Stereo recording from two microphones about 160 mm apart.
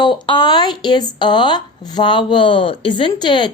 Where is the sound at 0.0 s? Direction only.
30° left (ahead or behind).